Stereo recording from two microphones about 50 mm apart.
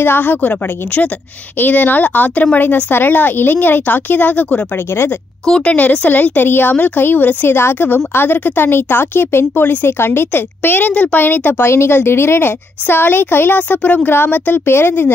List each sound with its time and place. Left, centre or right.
0.0 s a woman's voice: left
0.4 s a woman's voice: left
1.6 s speech: left
5.7 s a woman's voice: left
10.9 s a woman's voice: left
11.1 s speech: left
11.6 s a woman's voice: left